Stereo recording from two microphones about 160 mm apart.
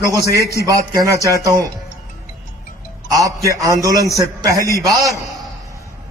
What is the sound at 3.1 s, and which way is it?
Music, 20° right (ahead or behind).